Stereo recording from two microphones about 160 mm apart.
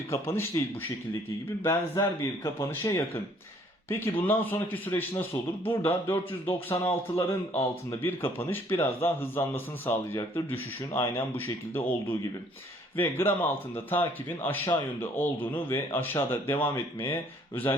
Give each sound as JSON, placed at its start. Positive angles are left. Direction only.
{"t": 0.1, "sound": "speech", "side_deg": 15}
{"t": 4.3, "sound": "speech", "side_deg": 15}